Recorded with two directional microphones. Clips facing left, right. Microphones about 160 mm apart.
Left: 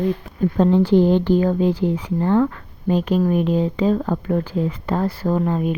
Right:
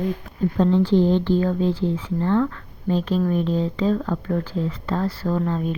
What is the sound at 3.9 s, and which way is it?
Speech, 30° left (ahead or behind).